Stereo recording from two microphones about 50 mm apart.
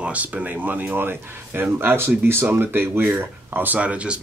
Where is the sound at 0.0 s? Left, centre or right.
Right.